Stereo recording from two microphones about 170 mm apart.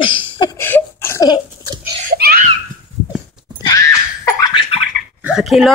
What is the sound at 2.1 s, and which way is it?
Belly laugh, 65° right (ahead or behind).